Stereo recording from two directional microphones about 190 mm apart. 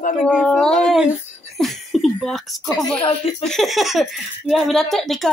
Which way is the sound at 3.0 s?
30° left (ahead or behind).